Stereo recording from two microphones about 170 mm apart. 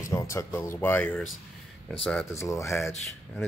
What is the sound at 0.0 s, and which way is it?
Speech, 20° left (ahead or behind).